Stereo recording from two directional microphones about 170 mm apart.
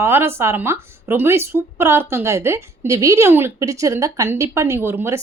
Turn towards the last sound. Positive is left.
turn(degrees=-15)  # may be behind; listen again after turning